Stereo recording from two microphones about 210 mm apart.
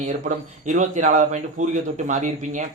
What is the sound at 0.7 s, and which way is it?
Speech, 35° right (ahead or behind).